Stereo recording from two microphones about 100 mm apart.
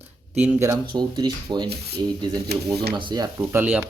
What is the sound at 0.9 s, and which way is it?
Speech, 45° right (ahead or behind).